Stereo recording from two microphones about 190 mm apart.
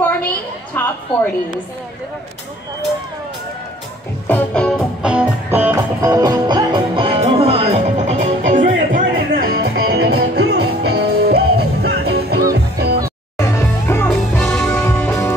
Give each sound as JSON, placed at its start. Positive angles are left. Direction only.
{"t": 0.0, "sound": "a sound", "side_deg": 10}
{"t": 4.3, "sound": "music", "side_deg": 5}
{"t": 13.4, "sound": "music", "side_deg": 15}